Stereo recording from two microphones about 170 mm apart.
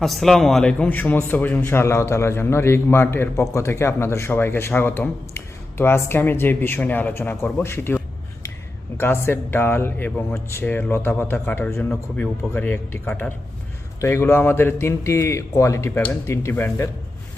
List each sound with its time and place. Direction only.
0.0 s a man's voice: centre (ahead or behind)
9.0 s a man's voice: 15° left (ahead or behind)